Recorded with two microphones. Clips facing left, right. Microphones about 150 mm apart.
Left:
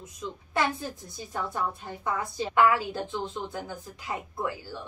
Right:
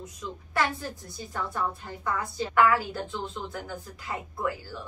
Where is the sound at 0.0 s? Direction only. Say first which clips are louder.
Even; 20° left (ahead or behind).